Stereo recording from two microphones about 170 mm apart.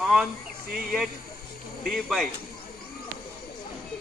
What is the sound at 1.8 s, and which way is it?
Speech, centre (ahead or behind).